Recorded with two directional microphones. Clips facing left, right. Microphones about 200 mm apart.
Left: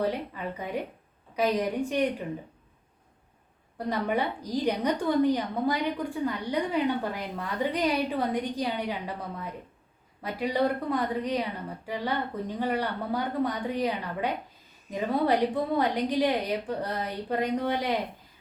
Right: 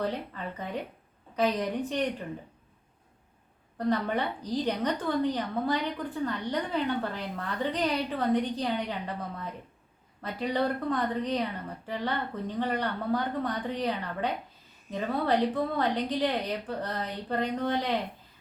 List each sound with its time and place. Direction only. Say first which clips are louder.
0.0 s a woman's voice: left 3 dB; 10° left (ahead or behind)
3.8 s a woman's voice: even; 10° left (ahead or behind)